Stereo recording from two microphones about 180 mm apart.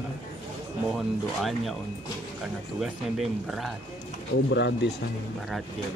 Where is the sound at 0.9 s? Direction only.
Centre (ahead or behind).